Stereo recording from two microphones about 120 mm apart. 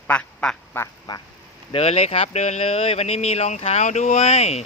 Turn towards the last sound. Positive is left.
turn(degrees=60)  # may be behind; listen again after turning